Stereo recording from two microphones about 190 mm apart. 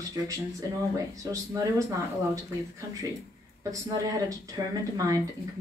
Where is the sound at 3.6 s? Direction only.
15° right (ahead or behind).